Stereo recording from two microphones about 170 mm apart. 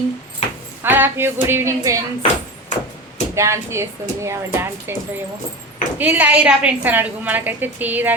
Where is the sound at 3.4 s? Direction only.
15° right (ahead or behind).